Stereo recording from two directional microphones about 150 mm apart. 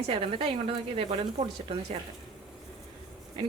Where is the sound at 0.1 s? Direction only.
35° right (ahead or behind).